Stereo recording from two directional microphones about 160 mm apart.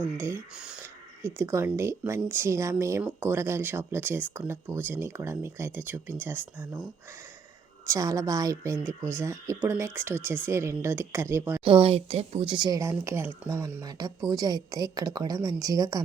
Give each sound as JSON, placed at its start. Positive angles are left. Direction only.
{"t": 0.2, "sound": "speech", "side_deg": -15}
{"t": 1.2, "sound": "speech", "side_deg": -15}
{"t": 7.9, "sound": "speech", "side_deg": -20}
{"t": 11.6, "sound": "speech", "side_deg": -35}
{"t": 13.8, "sound": "speech", "side_deg": -25}